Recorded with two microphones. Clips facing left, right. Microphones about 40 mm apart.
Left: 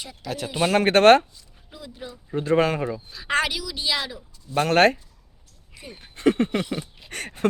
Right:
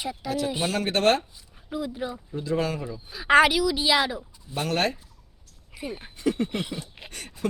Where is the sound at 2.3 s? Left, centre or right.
Left.